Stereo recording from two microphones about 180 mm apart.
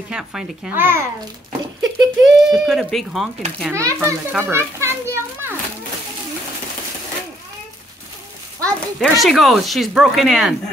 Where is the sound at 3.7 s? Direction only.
15° right (ahead or behind).